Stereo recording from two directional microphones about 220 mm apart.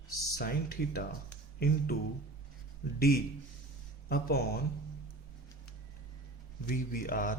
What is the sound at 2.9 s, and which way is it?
Speech, 40° left (ahead or behind).